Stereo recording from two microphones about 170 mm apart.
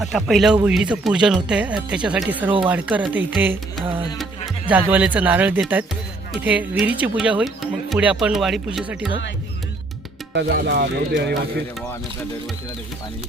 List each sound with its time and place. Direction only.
0.0 s speech: centre (ahead or behind)
4.7 s speech: 10° right (ahead or behind)
10.3 s speech: 75° right (ahead or behind)